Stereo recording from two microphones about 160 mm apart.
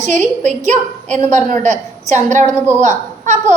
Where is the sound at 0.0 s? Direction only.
50° right (ahead or behind).